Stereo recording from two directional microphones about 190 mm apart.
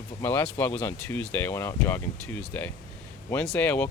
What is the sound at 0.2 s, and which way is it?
Speech, 10° left (ahead or behind).